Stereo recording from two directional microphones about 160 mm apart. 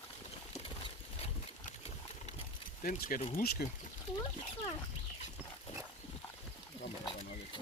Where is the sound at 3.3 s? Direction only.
75° left (ahead or behind).